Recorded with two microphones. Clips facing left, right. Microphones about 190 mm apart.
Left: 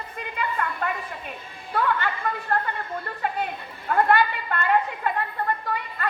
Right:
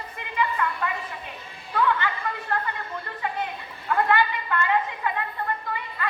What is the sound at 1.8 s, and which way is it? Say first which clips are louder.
Chatter: right 1 dB; 50° left (ahead or behind).